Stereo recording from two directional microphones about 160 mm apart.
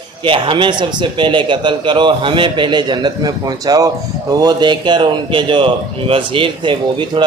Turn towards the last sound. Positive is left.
turn(degrees=-30)  # may be behind; listen again after turning